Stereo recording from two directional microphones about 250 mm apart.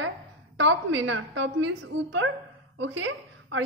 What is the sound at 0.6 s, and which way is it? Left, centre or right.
A woman's voice, right.